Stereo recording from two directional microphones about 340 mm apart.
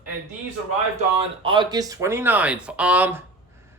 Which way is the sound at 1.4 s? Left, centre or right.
Centre.